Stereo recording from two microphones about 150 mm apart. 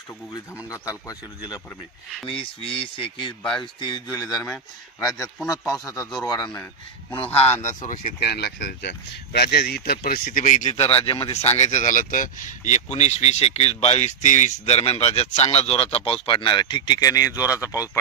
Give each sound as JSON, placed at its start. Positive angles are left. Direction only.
{"t": 0.3, "sound": "speech", "side_deg": 20}
{"t": 2.3, "sound": "speech", "side_deg": 35}
{"t": 7.6, "sound": "speech", "side_deg": 55}
{"t": 10.4, "sound": "speech", "side_deg": 55}
{"t": 10.8, "sound": "speech", "side_deg": 35}
{"t": 14.6, "sound": "speech", "side_deg": 45}